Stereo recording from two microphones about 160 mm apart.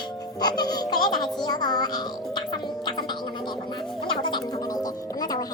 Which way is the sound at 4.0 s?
30° left (ahead or behind).